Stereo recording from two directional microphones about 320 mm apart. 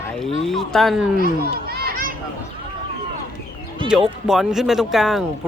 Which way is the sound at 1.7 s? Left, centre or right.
Right.